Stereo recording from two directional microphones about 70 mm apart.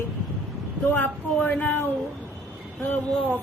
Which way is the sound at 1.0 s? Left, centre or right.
Left.